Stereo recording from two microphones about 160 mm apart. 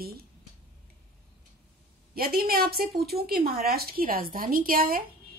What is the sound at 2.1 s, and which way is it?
A woman's voice, 70° right (ahead or behind).